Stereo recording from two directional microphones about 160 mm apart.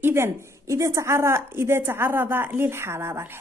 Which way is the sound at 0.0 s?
15° right (ahead or behind).